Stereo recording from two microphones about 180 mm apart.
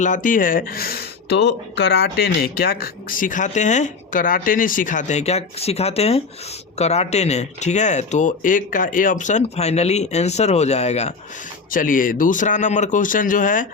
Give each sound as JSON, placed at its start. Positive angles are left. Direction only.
{"t": 0.0, "sound": "speech", "side_deg": 45}
{"t": 11.7, "sound": "speech", "side_deg": 50}